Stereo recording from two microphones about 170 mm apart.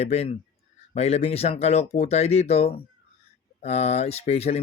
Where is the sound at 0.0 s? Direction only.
40° left (ahead or behind).